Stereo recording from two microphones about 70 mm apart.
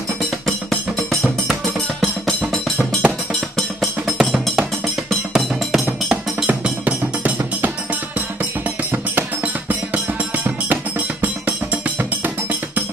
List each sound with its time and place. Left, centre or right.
0.5 s music: centre
2.5 s music: centre; by 7.7 s right
8.9 s music: right